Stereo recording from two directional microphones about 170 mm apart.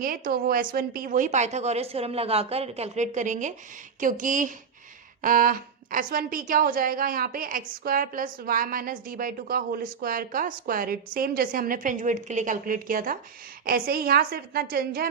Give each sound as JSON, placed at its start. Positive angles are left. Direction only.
{"t": 0.0, "sound": "a woman's voice", "side_deg": -55}